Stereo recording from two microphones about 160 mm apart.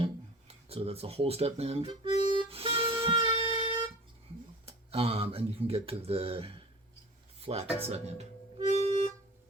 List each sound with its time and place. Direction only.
0.0 s speech: 35° right (ahead or behind)
2.3 s music: 35° right (ahead or behind)
4.6 s speech: 35° right (ahead or behind)
7.4 s music: 40° right (ahead or behind)